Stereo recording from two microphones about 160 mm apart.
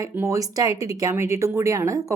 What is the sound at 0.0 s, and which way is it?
Speech, 20° right (ahead or behind).